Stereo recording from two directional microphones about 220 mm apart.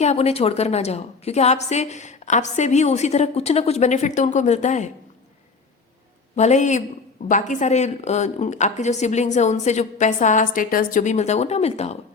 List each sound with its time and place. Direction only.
0.0 s a woman's voice: 30° left (ahead or behind)
6.3 s a woman's voice: 30° left (ahead or behind)